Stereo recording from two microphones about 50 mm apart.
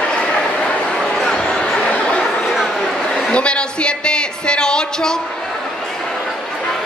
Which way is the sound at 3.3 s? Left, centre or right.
Left.